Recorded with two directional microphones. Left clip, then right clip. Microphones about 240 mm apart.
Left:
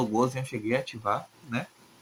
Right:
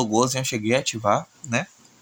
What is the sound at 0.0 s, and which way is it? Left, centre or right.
Speech, right.